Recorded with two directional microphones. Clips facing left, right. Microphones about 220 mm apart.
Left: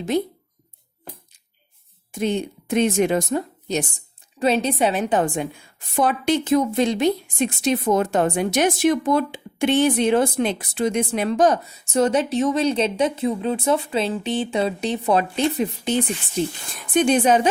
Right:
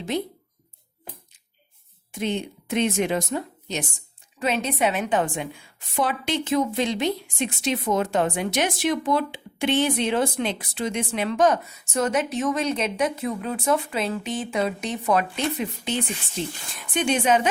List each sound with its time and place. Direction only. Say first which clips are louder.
2.1 s a woman's voice: left 4 dB; 45° left (ahead or behind)
6.0 s a woman's voice: left 5 dB; 50° left (ahead or behind)